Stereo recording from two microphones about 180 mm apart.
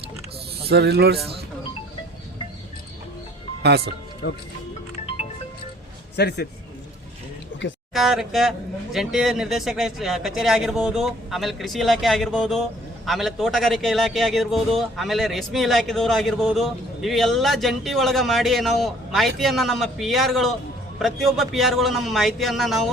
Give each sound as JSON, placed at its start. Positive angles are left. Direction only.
{"t": 0.7, "sound": "speech", "side_deg": -65}
{"t": 3.6, "sound": "speech", "side_deg": -65}
{"t": 4.2, "sound": "speech", "side_deg": 60}
{"t": 6.1, "sound": "a man's voice", "side_deg": 65}
{"t": 7.9, "sound": "a man's voice", "side_deg": 0}